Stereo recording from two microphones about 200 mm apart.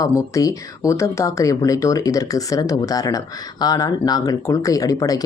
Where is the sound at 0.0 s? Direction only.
15° left (ahead or behind).